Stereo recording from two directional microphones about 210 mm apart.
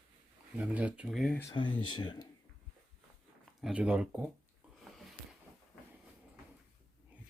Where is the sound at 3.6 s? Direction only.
5° right (ahead or behind).